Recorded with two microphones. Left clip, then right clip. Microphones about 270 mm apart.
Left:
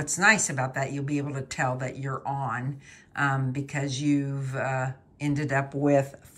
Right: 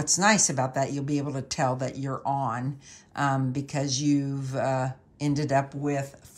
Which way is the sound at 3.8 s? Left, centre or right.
Centre.